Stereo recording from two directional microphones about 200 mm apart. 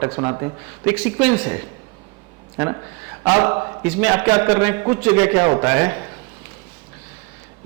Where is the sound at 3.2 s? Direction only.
20° right (ahead or behind).